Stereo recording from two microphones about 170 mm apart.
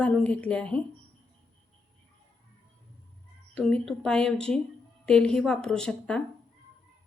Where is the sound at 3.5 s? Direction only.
5° left (ahead or behind).